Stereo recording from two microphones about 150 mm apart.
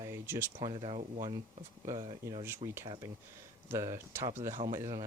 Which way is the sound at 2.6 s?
40° right (ahead or behind).